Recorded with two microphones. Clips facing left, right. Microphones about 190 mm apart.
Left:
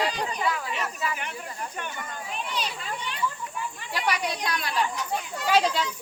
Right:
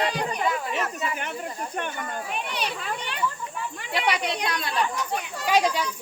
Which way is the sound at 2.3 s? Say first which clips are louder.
Left 1 dB; 65° right (ahead or behind).